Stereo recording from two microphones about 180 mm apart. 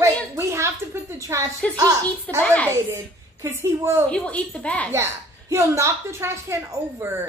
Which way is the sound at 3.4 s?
15° right (ahead or behind).